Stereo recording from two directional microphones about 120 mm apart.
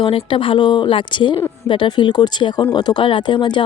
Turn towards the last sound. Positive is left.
turn(degrees=40)  # may be behind; listen again after turning